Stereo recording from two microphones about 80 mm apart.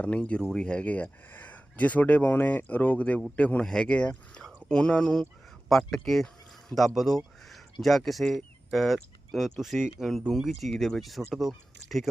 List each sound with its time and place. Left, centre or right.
0.0 s speech: centre